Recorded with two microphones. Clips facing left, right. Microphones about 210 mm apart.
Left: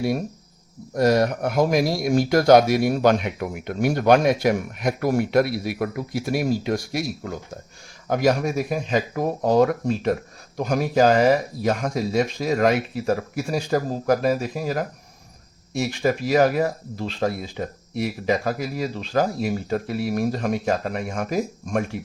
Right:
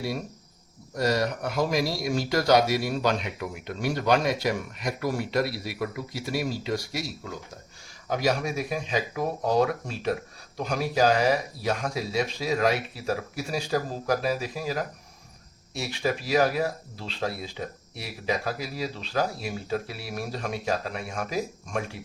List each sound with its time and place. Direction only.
0.9 s speech: 50° left (ahead or behind)